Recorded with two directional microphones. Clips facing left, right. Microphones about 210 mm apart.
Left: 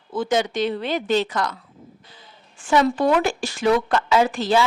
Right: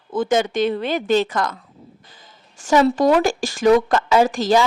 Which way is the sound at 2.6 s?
40° right (ahead or behind).